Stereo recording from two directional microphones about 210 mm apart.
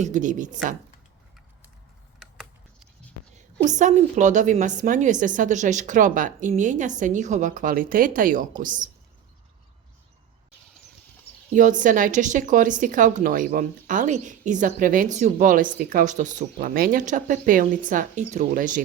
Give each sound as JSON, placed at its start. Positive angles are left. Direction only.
{"t": 0.0, "sound": "a woman's voice", "side_deg": -35}
{"t": 3.3, "sound": "a woman's voice", "side_deg": -35}
{"t": 11.5, "sound": "a woman's voice", "side_deg": -35}